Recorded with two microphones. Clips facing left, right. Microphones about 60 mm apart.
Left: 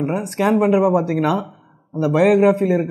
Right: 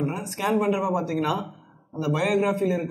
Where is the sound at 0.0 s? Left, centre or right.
Left.